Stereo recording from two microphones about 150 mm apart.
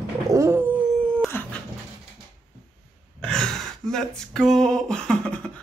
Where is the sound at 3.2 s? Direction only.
5° left (ahead or behind).